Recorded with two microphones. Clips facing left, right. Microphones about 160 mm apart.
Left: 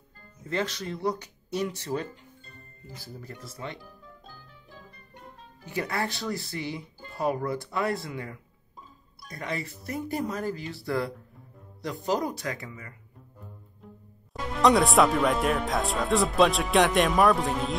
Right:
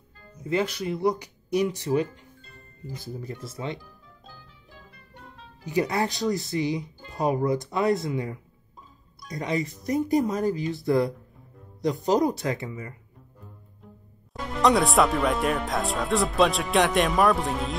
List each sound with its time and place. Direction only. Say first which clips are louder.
0.5 s speech: right 5 dB; 10° right (ahead or behind)
5.7 s speech: right 5 dB; 15° right (ahead or behind)
14.3 s speech: even; centre (ahead or behind)